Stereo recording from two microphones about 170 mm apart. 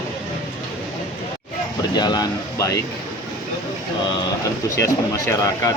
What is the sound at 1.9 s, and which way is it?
Speech, 25° left (ahead or behind).